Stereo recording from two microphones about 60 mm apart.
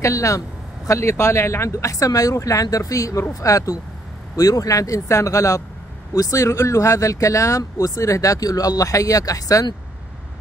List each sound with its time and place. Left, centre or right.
0.0 s speech: left
0.8 s speech: left